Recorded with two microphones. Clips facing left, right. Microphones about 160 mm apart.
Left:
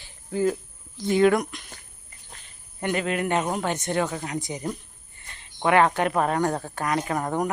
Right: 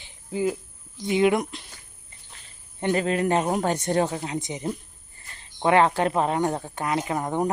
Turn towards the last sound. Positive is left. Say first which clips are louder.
# even
turn(degrees=-20)  # may be behind; listen again after turning